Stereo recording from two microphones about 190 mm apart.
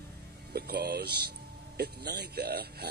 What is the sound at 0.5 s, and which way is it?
A man's voice, 55° right (ahead or behind).